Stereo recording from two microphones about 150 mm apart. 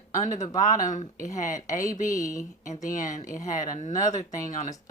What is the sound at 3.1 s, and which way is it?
Speech, 55° left (ahead or behind).